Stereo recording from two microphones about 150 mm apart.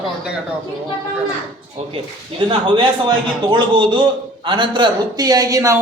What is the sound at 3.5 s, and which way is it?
A man's voice, 35° right (ahead or behind).